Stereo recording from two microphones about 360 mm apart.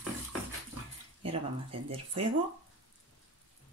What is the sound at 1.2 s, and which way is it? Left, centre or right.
Speech, centre.